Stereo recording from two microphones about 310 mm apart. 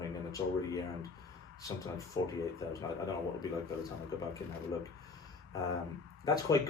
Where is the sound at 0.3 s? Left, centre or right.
Centre.